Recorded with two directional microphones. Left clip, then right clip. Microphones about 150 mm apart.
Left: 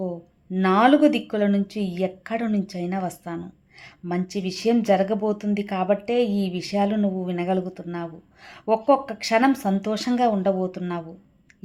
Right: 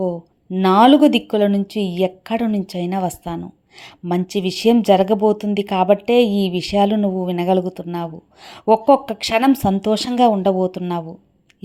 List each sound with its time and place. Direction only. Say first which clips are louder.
0.6 s a woman's voice: right 6 dB; 30° right (ahead or behind)